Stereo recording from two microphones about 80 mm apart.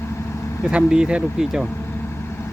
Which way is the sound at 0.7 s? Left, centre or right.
Centre.